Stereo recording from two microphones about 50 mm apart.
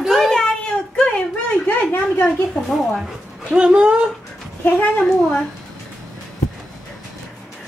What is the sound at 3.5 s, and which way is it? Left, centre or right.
Speech, right.